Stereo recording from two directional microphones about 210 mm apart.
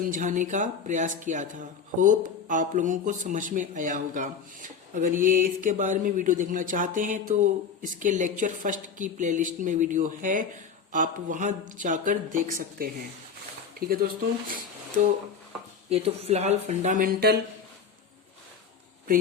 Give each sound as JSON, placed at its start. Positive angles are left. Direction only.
{"t": 0.1, "sound": "speech", "side_deg": -35}
{"t": 15.9, "sound": "speech", "side_deg": -30}